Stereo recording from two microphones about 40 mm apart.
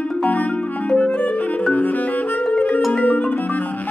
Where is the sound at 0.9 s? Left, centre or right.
Left.